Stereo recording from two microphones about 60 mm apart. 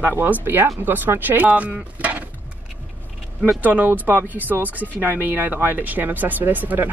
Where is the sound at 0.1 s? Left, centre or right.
Right.